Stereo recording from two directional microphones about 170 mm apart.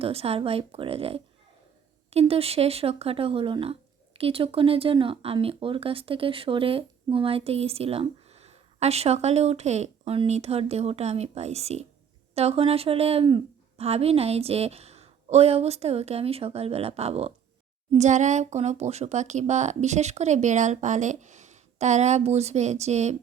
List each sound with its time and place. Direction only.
0.0 s speech: 35° right (ahead or behind)